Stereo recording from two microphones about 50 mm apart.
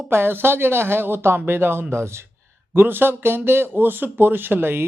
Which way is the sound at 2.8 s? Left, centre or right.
Right.